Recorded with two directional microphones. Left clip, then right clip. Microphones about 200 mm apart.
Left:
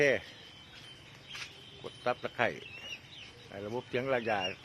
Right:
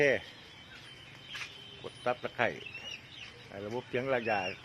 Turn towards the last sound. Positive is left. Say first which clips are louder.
# even
turn(degrees=0)  # may be behind; listen again after turning